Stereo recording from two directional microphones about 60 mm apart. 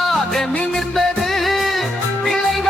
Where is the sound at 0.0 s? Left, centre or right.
Centre.